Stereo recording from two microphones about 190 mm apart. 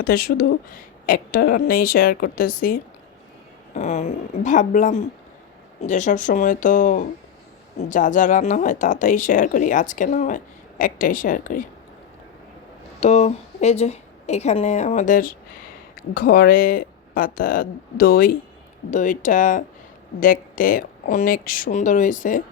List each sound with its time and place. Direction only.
0.0 s a woman's voice: 50° left (ahead or behind)
3.8 s a woman's voice: 35° left (ahead or behind)
13.0 s a woman's voice: 35° left (ahead or behind)